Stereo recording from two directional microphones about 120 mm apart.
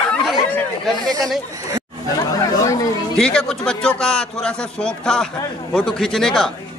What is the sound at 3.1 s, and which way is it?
A man's voice, 5° left (ahead or behind).